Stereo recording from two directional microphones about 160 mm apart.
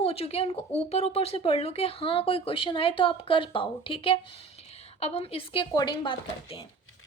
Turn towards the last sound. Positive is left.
turn(degrees=30)  # may be behind; listen again after turning